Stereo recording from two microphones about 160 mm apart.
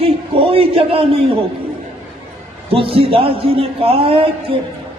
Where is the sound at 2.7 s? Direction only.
35° right (ahead or behind).